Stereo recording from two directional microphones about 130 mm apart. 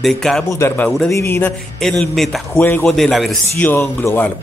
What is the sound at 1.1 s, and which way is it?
Speech, 20° left (ahead or behind).